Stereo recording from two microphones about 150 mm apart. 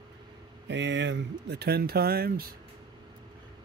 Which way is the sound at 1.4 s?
90° right.